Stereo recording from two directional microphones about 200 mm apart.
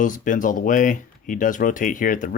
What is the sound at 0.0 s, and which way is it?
Speech, 40° left (ahead or behind).